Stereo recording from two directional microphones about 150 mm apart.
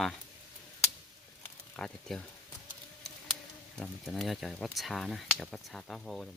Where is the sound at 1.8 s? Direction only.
5° left (ahead or behind).